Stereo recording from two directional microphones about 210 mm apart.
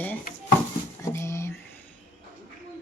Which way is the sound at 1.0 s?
15° left (ahead or behind).